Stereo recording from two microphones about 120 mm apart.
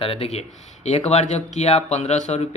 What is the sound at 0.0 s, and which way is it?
Speech, 55° left (ahead or behind).